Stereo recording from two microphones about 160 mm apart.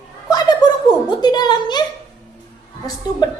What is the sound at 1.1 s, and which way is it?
Speech, 25° left (ahead or behind).